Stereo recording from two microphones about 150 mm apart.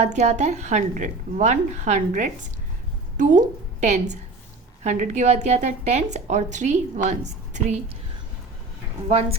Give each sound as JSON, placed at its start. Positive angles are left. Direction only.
{"t": 0.0, "sound": "a woman's voice", "side_deg": -50}